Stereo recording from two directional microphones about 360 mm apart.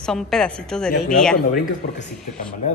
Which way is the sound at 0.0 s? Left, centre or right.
Centre.